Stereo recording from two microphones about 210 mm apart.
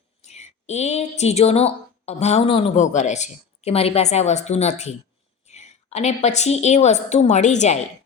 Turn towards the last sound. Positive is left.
turn(degrees=35)  # may be behind; listen again after turning